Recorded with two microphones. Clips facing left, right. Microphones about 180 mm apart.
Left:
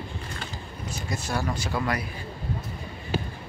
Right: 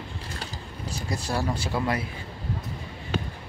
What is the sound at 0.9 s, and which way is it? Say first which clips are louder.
Speech: right 1 dB; 35° right (ahead or behind).